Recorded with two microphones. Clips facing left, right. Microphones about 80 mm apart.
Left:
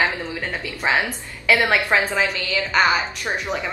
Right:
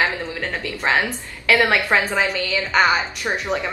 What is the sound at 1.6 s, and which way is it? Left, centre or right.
A woman's voice, centre.